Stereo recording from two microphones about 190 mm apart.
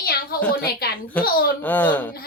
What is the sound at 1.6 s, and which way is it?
Speech, 10° left (ahead or behind).